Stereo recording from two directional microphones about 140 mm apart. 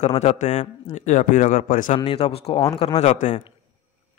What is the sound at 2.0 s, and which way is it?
Speech, 45° left (ahead or behind).